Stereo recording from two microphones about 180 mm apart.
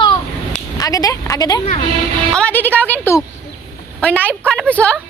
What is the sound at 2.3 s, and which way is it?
Speech, 10° left (ahead or behind).